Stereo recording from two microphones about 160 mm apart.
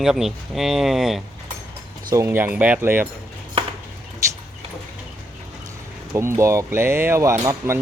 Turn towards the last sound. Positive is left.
turn(degrees=-15)  # may be behind; listen again after turning